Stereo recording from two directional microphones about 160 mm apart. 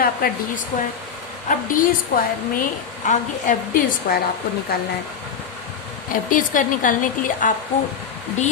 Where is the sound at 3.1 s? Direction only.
55° left (ahead or behind).